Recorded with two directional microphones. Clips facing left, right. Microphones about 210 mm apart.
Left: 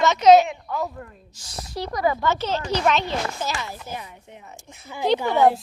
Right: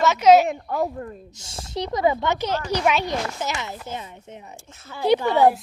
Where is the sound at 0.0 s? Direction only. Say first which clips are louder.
Left 1 dB; 10° right (ahead or behind).